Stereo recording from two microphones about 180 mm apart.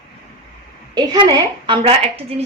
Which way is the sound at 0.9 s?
25° right (ahead or behind).